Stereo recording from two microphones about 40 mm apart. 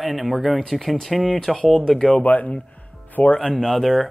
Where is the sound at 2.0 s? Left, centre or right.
Left.